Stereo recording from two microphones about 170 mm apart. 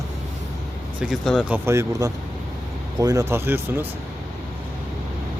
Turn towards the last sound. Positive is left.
turn(degrees=-15)  # may be behind; listen again after turning